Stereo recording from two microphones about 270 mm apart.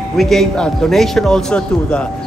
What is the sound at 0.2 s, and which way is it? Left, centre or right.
A woman's voice, centre.